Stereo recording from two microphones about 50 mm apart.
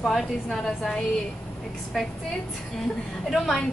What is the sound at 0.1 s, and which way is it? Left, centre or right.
Speech, centre.